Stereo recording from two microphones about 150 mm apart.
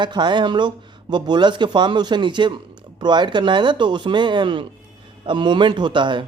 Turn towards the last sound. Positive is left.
turn(degrees=-30)  # may be behind; listen again after turning